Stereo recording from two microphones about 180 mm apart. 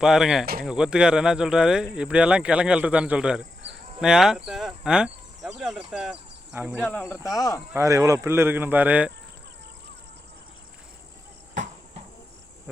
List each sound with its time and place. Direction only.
0.0 s speech: centre (ahead or behind)
6.7 s speech: 10° left (ahead or behind)
7.2 s speech: 20° left (ahead or behind)
7.7 s speech: 15° right (ahead or behind)
11.5 s cricket: 40° right (ahead or behind)